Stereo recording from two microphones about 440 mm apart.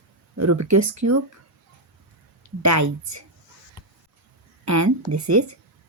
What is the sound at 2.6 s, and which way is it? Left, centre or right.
Speech, right.